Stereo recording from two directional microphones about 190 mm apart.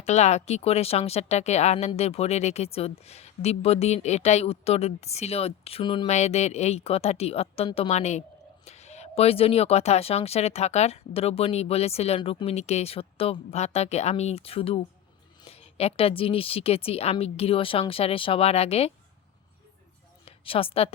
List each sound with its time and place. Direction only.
0.0 s speech: 35° left (ahead or behind)
6.1 s speech: 35° left (ahead or behind)
20.2 s a woman's voice: 30° left (ahead or behind)